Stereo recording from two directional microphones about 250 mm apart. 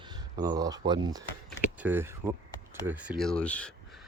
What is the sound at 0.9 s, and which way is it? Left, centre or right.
Speech, centre.